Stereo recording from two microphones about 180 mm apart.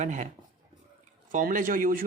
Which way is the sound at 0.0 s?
40° right (ahead or behind).